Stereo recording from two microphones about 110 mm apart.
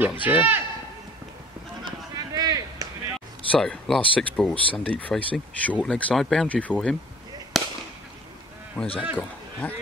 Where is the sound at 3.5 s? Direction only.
5° left (ahead or behind).